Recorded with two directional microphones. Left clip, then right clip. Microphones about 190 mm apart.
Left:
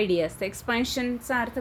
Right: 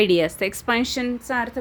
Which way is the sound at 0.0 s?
35° right (ahead or behind).